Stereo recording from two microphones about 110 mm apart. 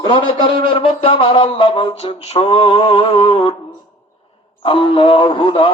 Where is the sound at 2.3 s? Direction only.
60° left (ahead or behind).